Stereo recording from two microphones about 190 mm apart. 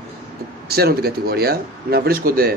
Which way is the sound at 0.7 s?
55° right (ahead or behind).